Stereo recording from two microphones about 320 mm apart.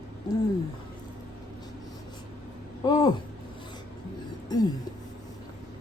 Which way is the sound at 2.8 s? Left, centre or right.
Centre.